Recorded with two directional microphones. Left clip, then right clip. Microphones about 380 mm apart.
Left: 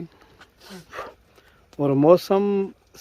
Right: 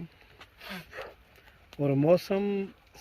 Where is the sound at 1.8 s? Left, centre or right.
Left.